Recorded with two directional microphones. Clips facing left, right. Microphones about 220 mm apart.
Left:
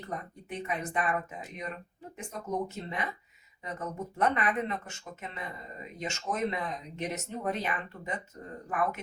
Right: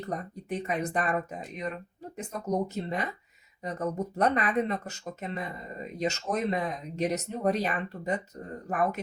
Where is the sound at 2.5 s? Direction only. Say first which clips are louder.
Right 5 dB; 40° right (ahead or behind).